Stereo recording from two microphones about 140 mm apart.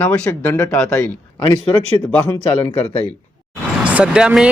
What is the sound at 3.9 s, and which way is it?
Speech, 10° right (ahead or behind).